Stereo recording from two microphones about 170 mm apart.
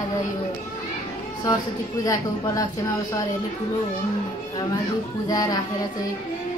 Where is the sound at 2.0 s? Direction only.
20° left (ahead or behind).